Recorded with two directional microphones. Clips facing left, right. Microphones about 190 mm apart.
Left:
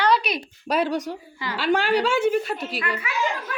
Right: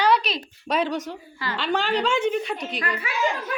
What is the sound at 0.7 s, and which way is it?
A woman's voice, 10° left (ahead or behind).